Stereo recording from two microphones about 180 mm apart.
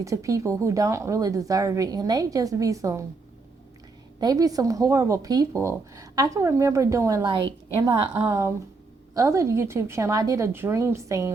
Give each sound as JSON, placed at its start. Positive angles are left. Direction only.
{"t": 0.0, "sound": "a woman's voice", "side_deg": -15}
{"t": 4.2, "sound": "a woman's voice", "side_deg": -20}